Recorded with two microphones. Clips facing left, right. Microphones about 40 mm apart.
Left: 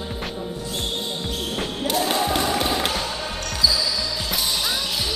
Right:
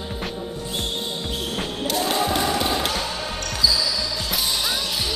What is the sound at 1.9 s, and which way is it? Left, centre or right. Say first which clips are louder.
Basketball bounce: left 1 dB; centre.